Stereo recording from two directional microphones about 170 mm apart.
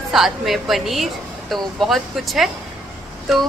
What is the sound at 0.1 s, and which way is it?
A woman's voice, centre (ahead or behind).